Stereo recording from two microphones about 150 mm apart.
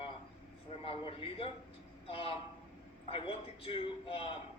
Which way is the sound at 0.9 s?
40° left (ahead or behind).